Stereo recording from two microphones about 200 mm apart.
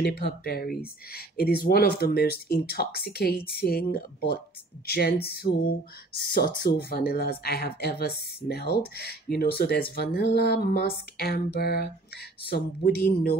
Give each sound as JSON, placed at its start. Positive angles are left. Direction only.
{"t": 0.0, "sound": "speech", "side_deg": 50}